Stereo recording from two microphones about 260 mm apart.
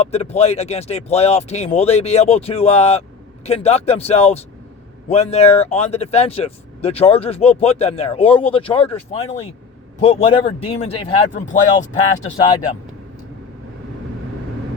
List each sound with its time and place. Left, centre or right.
0.0 s speech: left